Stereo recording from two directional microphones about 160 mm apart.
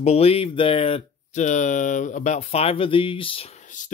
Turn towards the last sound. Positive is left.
turn(degrees=50)  # may be behind; listen again after turning